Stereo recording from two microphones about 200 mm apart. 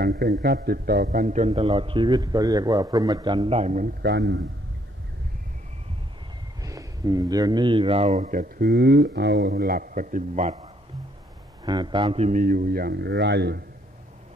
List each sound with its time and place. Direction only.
0.0 s a man's voice: 50° right (ahead or behind)
4.0 s a man's voice: 55° right (ahead or behind)
6.6 s speech: 15° right (ahead or behind); by 10.7 s 35° right (ahead or behind)
11.6 s a man's voice: 20° right (ahead or behind); by 13.7 s 55° right (ahead or behind)